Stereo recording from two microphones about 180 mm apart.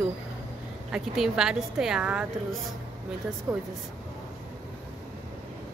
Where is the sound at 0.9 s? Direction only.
Centre (ahead or behind).